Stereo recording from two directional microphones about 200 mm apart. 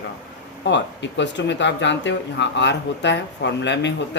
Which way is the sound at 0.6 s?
60° left (ahead or behind).